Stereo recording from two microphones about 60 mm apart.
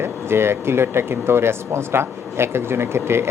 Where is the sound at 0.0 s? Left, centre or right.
Right.